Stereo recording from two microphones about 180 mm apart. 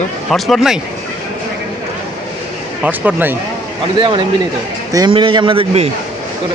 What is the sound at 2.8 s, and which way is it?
Speech, 10° right (ahead or behind).